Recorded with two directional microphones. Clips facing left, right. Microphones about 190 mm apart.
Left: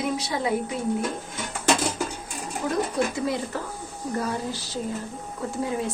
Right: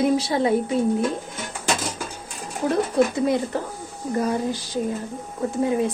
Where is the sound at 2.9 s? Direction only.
20° right (ahead or behind).